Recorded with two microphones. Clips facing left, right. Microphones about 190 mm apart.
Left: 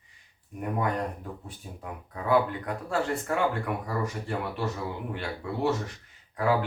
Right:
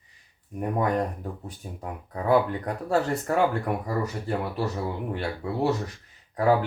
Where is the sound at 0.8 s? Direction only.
40° right (ahead or behind).